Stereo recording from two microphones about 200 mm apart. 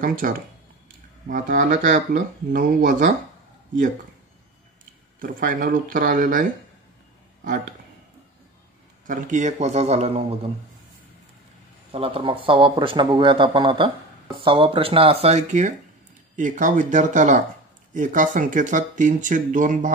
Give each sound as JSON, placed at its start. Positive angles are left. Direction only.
{"t": 0.0, "sound": "speech", "side_deg": -45}
{"t": 5.2, "sound": "speech", "side_deg": -45}
{"t": 9.0, "sound": "speech", "side_deg": -40}
{"t": 11.9, "sound": "speech", "side_deg": -30}